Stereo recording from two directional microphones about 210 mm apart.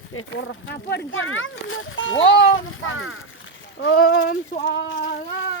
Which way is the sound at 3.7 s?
55° left (ahead or behind).